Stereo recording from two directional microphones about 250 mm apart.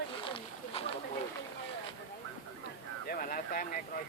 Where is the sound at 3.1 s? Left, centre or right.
Left.